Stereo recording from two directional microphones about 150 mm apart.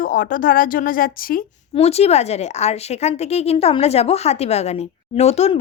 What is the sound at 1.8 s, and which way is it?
A woman's voice, 45° left (ahead or behind).